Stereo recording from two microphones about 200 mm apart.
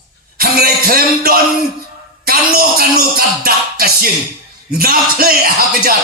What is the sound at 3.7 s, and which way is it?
Speech, 50° right (ahead or behind).